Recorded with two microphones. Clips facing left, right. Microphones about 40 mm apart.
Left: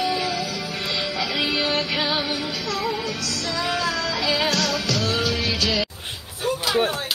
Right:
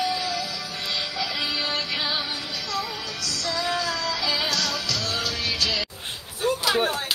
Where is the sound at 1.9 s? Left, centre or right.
Left.